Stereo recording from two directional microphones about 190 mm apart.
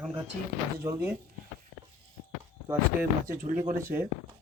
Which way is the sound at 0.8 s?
15° right (ahead or behind).